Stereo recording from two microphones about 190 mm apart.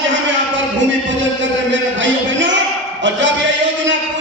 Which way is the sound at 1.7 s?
75° right (ahead or behind).